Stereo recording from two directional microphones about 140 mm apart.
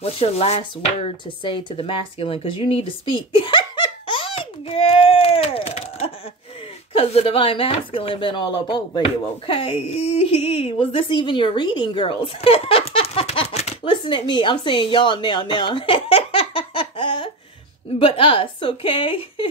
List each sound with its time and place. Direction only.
0.0 s a woman's voice: 45° left (ahead or behind)
13.8 s a woman's voice: 35° left (ahead or behind)